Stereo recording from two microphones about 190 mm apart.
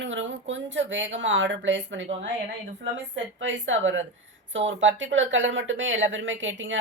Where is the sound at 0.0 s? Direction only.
75° right (ahead or behind).